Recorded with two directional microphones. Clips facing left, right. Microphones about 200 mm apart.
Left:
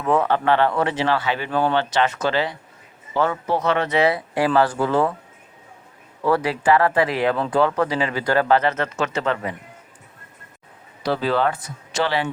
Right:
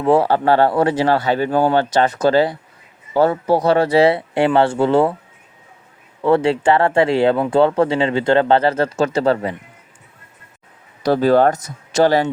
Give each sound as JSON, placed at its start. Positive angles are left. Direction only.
{"t": 0.0, "sound": "speech", "side_deg": -30}
{"t": 6.2, "sound": "speech", "side_deg": -25}
{"t": 11.0, "sound": "speech", "side_deg": -45}